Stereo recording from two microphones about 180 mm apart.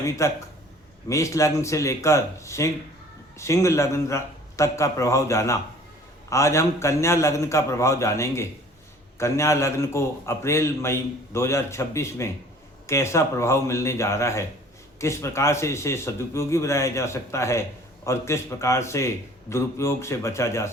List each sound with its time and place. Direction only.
0.0 s a man's voice: 15° left (ahead or behind)